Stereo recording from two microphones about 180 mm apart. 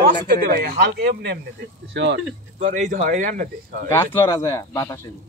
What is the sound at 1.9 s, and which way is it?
Speech, 75° right (ahead or behind).